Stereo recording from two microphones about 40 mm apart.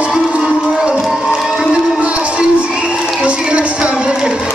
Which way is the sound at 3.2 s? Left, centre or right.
Right.